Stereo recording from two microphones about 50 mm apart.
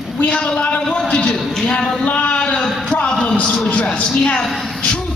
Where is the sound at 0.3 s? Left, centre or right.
Centre.